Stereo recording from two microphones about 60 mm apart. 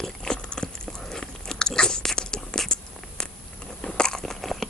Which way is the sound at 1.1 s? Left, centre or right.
Centre.